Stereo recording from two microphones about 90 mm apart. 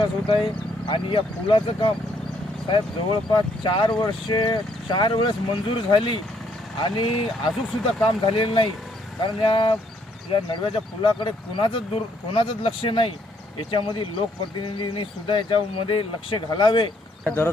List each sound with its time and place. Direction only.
0.0 s speech: 70° left (ahead or behind)
2.6 s speech: 60° left (ahead or behind)
5.6 s speech: 80° left
8.0 s speech: 90° left
9.2 s speech: 75° left (ahead or behind)
12.3 s speech: 85° left
13.7 s speech: 75° left (ahead or behind)
16.5 s speech: 65° left (ahead or behind)
17.2 s speech: 25° left (ahead or behind)